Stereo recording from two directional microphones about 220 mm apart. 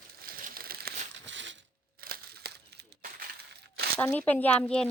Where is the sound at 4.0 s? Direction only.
10° left (ahead or behind).